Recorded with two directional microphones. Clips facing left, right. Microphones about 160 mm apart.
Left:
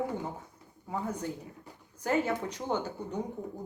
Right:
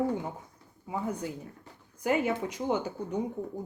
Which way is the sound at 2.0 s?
10° right (ahead or behind).